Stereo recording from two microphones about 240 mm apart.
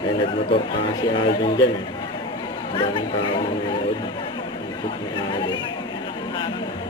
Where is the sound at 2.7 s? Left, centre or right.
Left.